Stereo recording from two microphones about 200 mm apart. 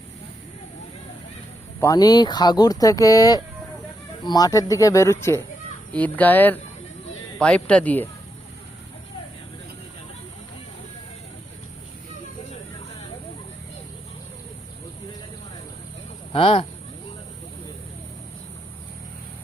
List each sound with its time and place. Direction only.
1.8 s speech: 20° left (ahead or behind)
16.3 s speech: 25° left (ahead or behind)